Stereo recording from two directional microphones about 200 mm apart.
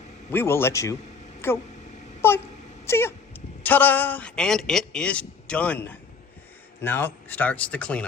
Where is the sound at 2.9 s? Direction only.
10° left (ahead or behind).